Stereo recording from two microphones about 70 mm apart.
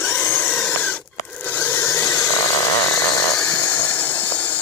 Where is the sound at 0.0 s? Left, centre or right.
Left.